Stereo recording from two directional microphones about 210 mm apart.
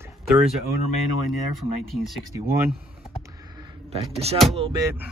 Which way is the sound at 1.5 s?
Centre (ahead or behind).